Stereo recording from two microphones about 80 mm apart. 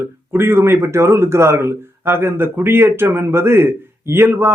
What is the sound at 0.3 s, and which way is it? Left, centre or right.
A man's voice, right.